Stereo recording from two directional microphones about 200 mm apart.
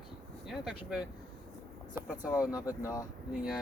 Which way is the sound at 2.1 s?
20° left (ahead or behind).